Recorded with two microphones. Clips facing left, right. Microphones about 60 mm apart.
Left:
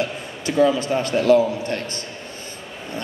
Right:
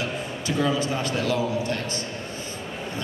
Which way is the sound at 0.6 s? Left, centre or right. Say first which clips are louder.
Left 7 dB; left.